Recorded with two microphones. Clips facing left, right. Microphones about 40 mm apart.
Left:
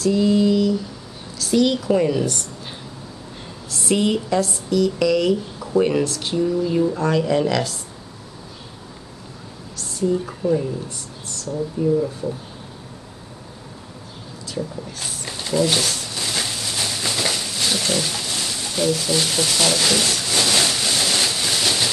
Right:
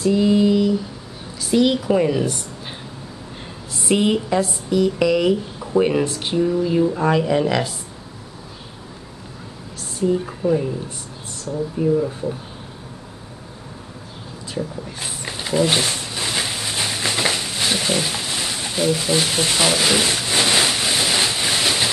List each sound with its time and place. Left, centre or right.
0.0 s a sound: centre
1.4 s speech: centre
3.7 s speech: centre
9.8 s a woman's voice: right
12.0 s speech: right
14.5 s a sound: right